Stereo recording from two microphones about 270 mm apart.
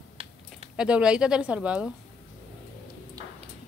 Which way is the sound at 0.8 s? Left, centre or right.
Centre.